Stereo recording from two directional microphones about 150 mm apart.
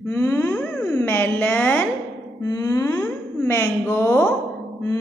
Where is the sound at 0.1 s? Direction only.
15° left (ahead or behind).